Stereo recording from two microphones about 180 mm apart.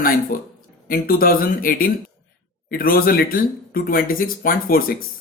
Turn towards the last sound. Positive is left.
turn(degrees=55)  # may be behind; listen again after turning